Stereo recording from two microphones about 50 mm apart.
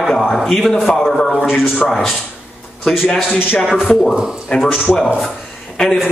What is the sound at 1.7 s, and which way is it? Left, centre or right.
Speech, centre.